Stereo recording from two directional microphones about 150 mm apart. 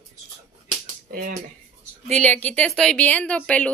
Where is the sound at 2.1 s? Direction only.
10° left (ahead or behind).